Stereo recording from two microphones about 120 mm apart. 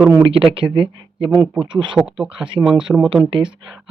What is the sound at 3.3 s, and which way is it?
Speech, 45° right (ahead or behind).